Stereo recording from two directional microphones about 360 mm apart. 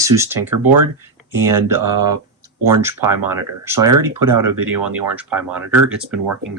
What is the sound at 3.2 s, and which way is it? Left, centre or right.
Speech, centre.